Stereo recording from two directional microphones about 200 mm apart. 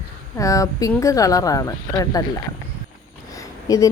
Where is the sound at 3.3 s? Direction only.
15° left (ahead or behind).